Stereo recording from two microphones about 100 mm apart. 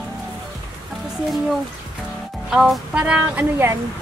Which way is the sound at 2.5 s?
5° right (ahead or behind).